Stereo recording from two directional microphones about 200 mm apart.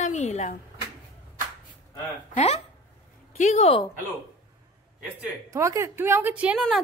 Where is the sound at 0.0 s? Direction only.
35° left (ahead or behind).